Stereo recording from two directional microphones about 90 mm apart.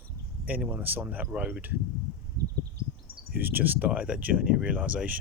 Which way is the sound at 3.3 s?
20° right (ahead or behind).